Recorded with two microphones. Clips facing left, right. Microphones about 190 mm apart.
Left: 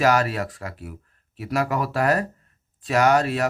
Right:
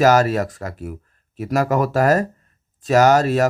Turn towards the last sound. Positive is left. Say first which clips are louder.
# right 5 dB
turn(degrees=-40)  # may be behind; listen again after turning